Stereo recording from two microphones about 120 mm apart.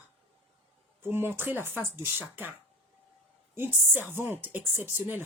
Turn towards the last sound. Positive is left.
turn(degrees=-15)  # may be behind; listen again after turning